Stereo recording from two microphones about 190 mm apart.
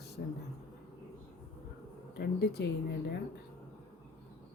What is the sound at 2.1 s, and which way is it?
Speech, 55° left (ahead or behind).